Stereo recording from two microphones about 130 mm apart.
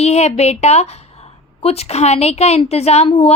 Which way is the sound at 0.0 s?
55° left (ahead or behind).